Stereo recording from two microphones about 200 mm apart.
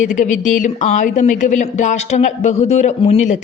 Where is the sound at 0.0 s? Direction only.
40° left (ahead or behind).